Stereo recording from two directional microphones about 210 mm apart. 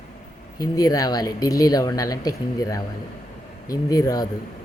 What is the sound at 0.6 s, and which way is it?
Speech, 15° left (ahead or behind).